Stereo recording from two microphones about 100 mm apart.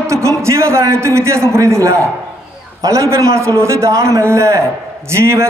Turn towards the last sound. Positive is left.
turn(degrees=-30)  # may be behind; listen again after turning